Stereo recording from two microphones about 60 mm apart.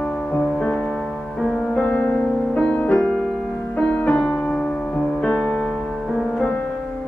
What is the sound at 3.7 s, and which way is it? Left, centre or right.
Music, centre.